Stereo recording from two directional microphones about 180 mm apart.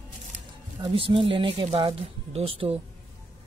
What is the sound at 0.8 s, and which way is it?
Speech, 30° right (ahead or behind).